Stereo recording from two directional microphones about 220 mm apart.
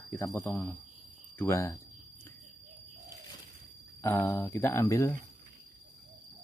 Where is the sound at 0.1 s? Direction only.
15° left (ahead or behind).